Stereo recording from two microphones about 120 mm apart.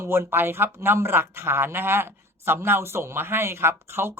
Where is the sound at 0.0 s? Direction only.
20° right (ahead or behind).